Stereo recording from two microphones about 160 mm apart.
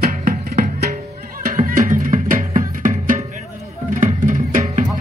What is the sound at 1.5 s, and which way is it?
Music, 55° right (ahead or behind).